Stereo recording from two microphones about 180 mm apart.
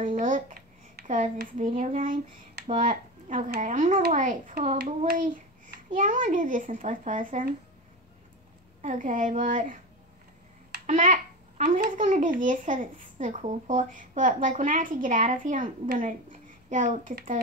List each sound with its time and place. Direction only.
0.1 s a sound: 50° right (ahead or behind)
1.7 s a child's voice: 35° right (ahead or behind); by 7.5 s 50° right (ahead or behind)
8.8 s a child's voice: 45° right (ahead or behind)
10.9 s babbling: 45° right (ahead or behind)
11.8 s a child's voice: 45° right (ahead or behind)